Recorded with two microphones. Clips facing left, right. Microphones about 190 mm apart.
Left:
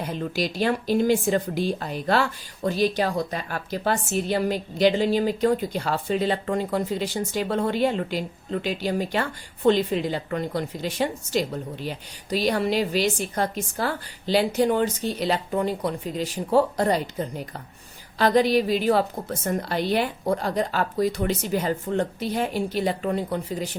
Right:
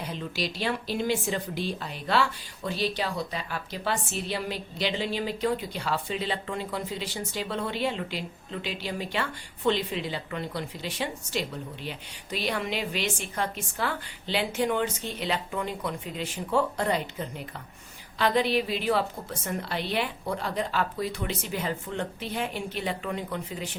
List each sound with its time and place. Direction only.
0.0 s speech: 45° left (ahead or behind)